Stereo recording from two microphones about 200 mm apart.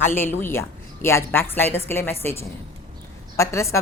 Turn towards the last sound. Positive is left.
turn(degrees=15)  # may be behind; listen again after turning